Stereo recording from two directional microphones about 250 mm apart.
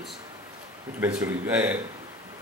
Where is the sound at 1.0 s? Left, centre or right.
Centre.